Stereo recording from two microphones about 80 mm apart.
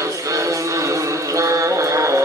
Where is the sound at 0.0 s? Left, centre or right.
Right.